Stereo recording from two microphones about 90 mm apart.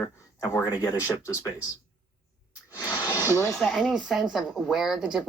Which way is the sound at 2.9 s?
40° left (ahead or behind).